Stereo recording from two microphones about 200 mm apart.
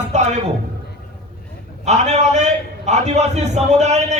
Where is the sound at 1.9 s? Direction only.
35° right (ahead or behind).